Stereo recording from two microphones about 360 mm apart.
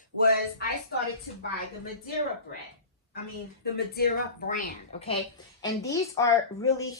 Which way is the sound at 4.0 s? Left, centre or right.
Left.